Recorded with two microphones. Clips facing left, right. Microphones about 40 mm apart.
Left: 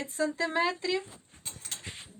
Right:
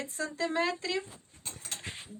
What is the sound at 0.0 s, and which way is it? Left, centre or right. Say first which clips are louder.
Speech: left 4 dB; centre.